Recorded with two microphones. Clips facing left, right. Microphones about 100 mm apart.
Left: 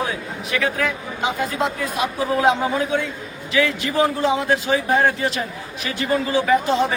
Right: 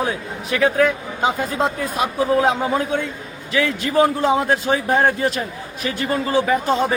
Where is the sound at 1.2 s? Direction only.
40° right (ahead or behind).